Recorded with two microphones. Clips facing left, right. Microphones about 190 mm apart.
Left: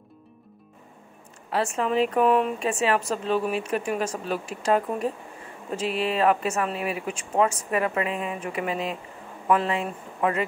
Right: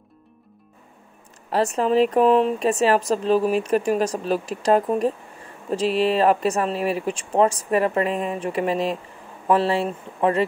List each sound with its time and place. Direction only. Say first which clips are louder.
1.5 s speech: right 5 dB; 35° right (ahead or behind)